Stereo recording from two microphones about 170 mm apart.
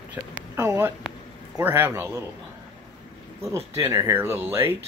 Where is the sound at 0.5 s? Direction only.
15° right (ahead or behind).